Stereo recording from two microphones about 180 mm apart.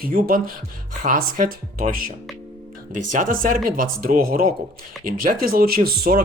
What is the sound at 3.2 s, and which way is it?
Speech, 50° right (ahead or behind).